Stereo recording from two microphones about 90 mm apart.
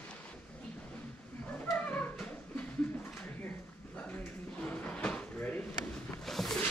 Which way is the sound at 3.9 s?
15° left (ahead or behind).